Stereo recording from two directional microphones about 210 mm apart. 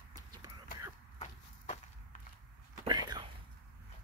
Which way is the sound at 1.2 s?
35° left (ahead or behind).